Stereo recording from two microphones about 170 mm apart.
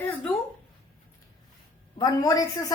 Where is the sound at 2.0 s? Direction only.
20° left (ahead or behind).